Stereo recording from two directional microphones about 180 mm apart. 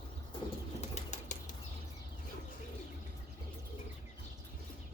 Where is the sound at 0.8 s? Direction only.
40° left (ahead or behind).